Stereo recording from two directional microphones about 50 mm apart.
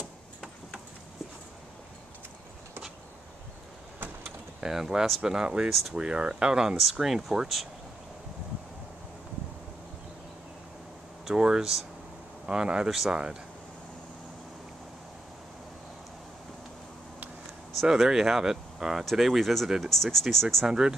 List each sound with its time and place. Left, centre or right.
0.0 s tick-tock: centre
4.6 s speech: centre
5.7 s speech: centre
5.9 s speech: centre
6.8 s speech: centre
11.2 s speech: centre
12.9 s speech: centre
17.8 s speech: centre
20.6 s speech: centre